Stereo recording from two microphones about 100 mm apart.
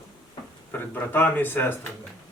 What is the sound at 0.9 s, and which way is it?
Speech, 20° left (ahead or behind).